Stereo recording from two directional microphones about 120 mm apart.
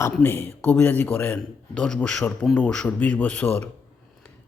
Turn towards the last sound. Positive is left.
turn(degrees=15)  # may be behind; listen again after turning